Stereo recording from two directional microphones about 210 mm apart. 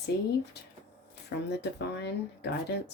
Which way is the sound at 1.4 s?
55° left (ahead or behind).